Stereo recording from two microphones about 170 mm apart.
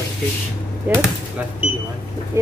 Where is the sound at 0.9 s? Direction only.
10° right (ahead or behind).